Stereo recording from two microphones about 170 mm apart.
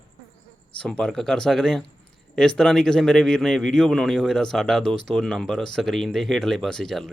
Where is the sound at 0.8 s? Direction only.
5° left (ahead or behind).